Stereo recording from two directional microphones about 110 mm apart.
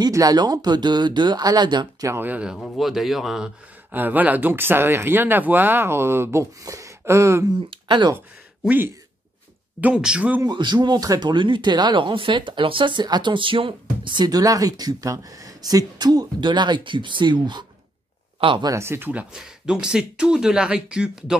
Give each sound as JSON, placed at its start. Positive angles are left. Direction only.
{"t": 0.0, "sound": "speech", "side_deg": -35}
{"t": 2.0, "sound": "speech", "side_deg": -20}
{"t": 3.9, "sound": "speech", "side_deg": -15}
{"t": 7.7, "sound": "speech", "side_deg": -45}
{"t": 8.6, "sound": "speech", "side_deg": -20}
{"t": 10.4, "sound": "speech", "side_deg": -40}
{"t": 18.7, "sound": "speech", "side_deg": -25}
{"t": 19.3, "sound": "speech", "side_deg": -5}